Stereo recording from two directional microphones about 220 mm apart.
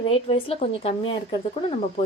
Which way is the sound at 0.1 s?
25° left (ahead or behind).